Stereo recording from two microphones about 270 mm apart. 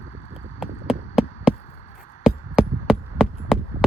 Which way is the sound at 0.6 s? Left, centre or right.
Centre.